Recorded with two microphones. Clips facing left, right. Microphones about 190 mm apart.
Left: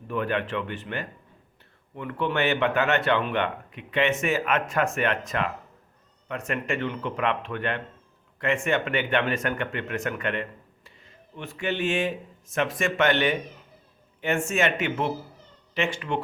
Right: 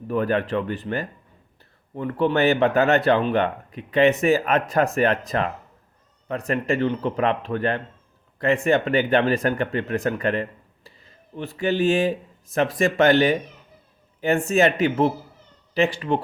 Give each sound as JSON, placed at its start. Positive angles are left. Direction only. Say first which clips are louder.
{"t": 0.1, "sound": "speech", "louder": "right 5 dB", "side_deg": -40}